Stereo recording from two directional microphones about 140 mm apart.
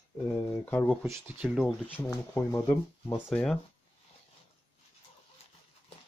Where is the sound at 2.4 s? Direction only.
15° left (ahead or behind).